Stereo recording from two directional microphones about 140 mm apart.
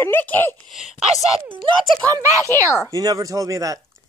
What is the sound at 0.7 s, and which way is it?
Speech, 5° right (ahead or behind).